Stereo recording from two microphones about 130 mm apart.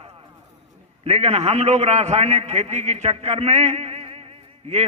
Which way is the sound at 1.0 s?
55° right (ahead or behind).